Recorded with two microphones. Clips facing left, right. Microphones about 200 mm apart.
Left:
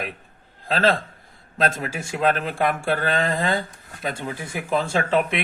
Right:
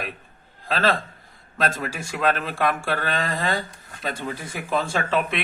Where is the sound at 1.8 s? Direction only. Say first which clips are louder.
Left 2 dB; 25° left (ahead or behind).